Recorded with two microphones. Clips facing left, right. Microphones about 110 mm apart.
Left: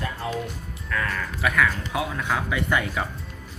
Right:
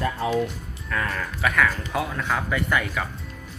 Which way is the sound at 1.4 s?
5° left (ahead or behind).